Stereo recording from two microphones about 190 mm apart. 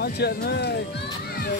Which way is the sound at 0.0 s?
55° left (ahead or behind).